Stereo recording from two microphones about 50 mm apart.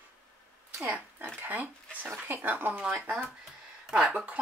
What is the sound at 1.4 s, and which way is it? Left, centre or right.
Speech, right.